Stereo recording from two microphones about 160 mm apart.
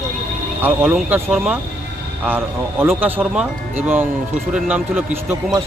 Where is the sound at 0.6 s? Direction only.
5° right (ahead or behind).